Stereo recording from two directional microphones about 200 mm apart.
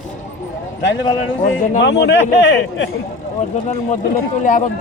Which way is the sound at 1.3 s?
75° left (ahead or behind).